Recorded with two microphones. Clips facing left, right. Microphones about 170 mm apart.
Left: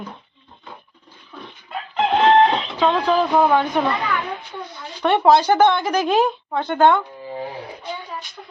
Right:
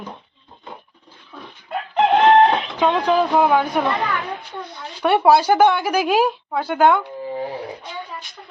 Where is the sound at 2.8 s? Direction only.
15° right (ahead or behind).